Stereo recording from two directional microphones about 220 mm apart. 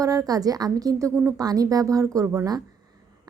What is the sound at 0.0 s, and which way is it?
Speech, 15° right (ahead or behind).